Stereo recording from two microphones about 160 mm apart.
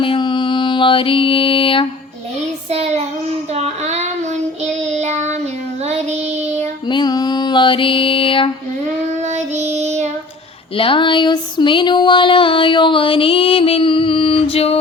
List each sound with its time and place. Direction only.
0.0 s mantra: 30° left (ahead or behind)
2.6 s child singing: 40° right (ahead or behind)
6.8 s mantra: 25° left (ahead or behind)
9.2 s child singing: 45° right (ahead or behind)
10.8 s female singing: 30° left (ahead or behind)